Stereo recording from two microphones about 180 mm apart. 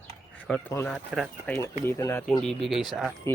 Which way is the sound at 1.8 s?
15° left (ahead or behind).